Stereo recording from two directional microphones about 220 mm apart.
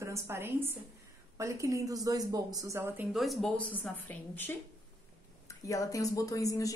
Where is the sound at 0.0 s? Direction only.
10° right (ahead or behind).